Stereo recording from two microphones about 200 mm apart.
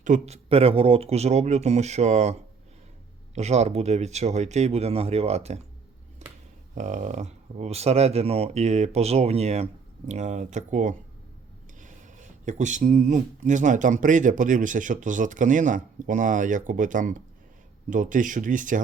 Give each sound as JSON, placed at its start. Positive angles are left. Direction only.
{"t": 0.0, "sound": "speech", "side_deg": -35}
{"t": 6.2, "sound": "a sound", "side_deg": -35}
{"t": 6.7, "sound": "speech", "side_deg": -35}